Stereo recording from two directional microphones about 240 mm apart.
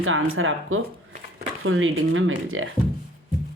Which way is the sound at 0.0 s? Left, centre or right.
Right.